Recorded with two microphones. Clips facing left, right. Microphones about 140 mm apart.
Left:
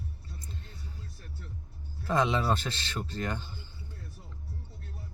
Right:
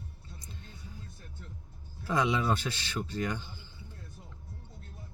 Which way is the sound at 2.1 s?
10° right (ahead or behind).